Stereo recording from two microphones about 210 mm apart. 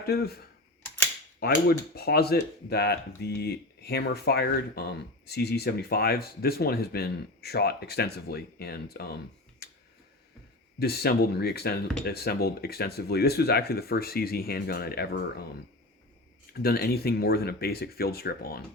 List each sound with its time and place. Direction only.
0.0 s speech: 50° left (ahead or behind)
1.4 s speech: 45° left (ahead or behind)
9.6 s tick: 50° left (ahead or behind)
10.8 s speech: 50° left (ahead or behind)
16.5 s speech: 45° left (ahead or behind)